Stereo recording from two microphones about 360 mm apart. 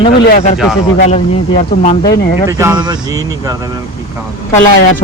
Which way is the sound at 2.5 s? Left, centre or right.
Centre.